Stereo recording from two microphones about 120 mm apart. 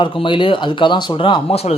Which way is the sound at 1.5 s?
60° left (ahead or behind).